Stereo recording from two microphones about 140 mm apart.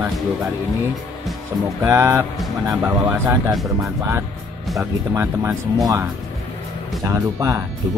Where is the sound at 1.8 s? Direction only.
20° right (ahead or behind).